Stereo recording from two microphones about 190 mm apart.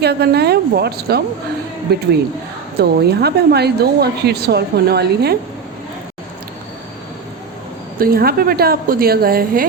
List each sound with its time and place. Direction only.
0.0 s speech: 60° right (ahead or behind)
7.9 s a woman's voice: 50° right (ahead or behind)